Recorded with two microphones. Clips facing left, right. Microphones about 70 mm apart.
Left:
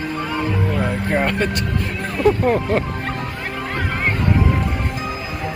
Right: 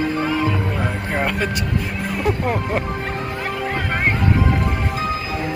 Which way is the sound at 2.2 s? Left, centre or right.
Centre.